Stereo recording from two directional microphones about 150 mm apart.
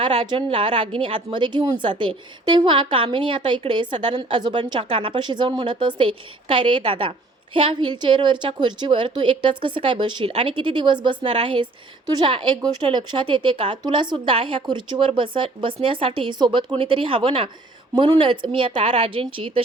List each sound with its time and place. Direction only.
0.0 s a woman's voice: 35° right (ahead or behind)